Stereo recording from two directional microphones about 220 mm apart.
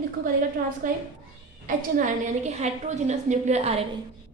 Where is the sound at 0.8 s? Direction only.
40° right (ahead or behind).